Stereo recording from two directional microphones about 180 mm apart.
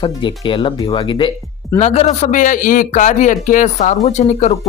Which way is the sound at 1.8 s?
40° left (ahead or behind).